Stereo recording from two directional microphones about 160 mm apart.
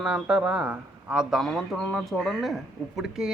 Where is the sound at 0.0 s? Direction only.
5° right (ahead or behind).